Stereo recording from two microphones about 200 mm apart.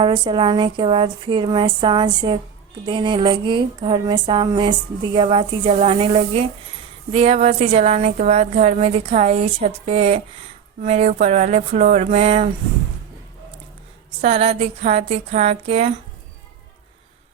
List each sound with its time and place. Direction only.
0.0 s speech: 25° right (ahead or behind)
14.2 s speech: 30° right (ahead or behind)